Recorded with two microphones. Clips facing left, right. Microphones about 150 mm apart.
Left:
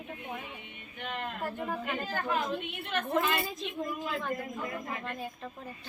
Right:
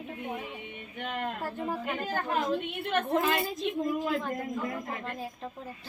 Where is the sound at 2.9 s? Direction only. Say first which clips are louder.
Right 3 dB; 35° right (ahead or behind).